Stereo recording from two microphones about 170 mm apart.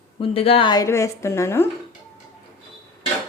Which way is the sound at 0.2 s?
35° left (ahead or behind).